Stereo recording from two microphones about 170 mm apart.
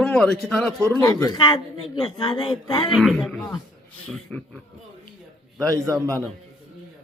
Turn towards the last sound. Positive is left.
turn(degrees=-20)  # may be behind; listen again after turning